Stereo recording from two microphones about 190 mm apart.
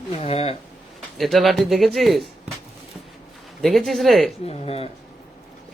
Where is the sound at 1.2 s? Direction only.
Centre (ahead or behind).